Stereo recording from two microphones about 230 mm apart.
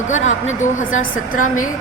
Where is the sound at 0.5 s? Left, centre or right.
Left.